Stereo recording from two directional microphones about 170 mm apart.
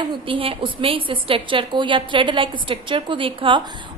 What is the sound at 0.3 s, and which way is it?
A woman's voice, 30° right (ahead or behind).